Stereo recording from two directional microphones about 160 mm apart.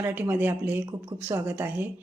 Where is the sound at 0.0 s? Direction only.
15° right (ahead or behind).